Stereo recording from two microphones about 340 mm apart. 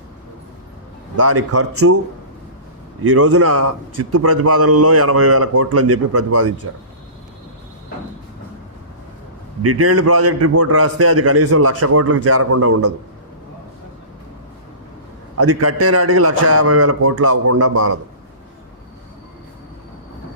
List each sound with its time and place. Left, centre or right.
1.1 s a man's voice: right
3.0 s a man's voice: right
9.6 s a man's voice: right
15.4 s a man's voice: right